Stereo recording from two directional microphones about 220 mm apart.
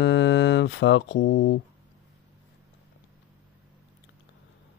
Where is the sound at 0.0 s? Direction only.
55° left (ahead or behind).